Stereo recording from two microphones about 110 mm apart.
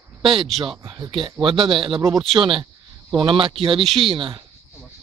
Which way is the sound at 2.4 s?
35° right (ahead or behind).